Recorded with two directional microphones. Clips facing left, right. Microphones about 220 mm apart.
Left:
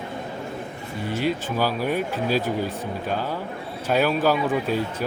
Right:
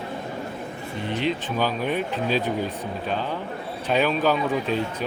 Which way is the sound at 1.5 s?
10° left (ahead or behind).